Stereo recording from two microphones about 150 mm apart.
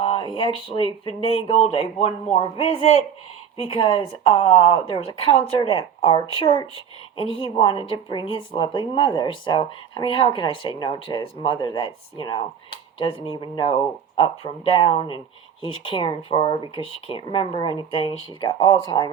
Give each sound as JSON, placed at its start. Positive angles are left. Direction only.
{"t": 0.0, "sound": "a woman's voice", "side_deg": 35}